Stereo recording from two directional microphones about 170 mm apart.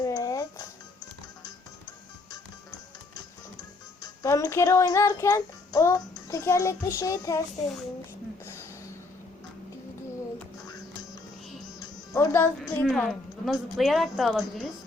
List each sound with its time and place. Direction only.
0.0 s music: 20° left (ahead or behind)
4.0 s child singing: 20° left (ahead or behind)
7.0 s a child's voice: 20° left (ahead or behind)
11.8 s music: 15° left (ahead or behind)
12.6 s a woman's voice: 5° left (ahead or behind)